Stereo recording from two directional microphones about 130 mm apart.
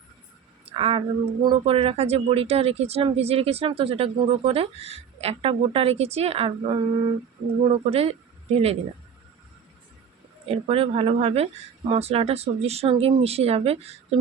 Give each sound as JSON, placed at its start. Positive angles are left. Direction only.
{"t": 0.6, "sound": "a sound", "side_deg": -45}
{"t": 1.5, "sound": "speech", "side_deg": -45}
{"t": 10.4, "sound": "speech", "side_deg": -50}